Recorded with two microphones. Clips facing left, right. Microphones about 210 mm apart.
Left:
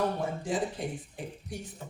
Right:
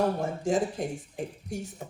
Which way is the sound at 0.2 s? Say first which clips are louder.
Right 4 dB; 45° right (ahead or behind).